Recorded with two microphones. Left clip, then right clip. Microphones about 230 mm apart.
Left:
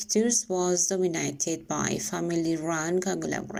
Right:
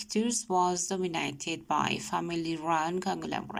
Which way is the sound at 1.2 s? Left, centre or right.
Right.